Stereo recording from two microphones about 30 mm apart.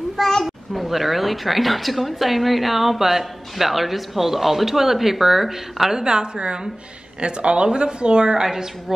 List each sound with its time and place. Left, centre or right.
0.2 s children playing: centre
0.8 s a woman's voice: centre
5.9 s a woman's voice: right
8.4 s a woman's voice: centre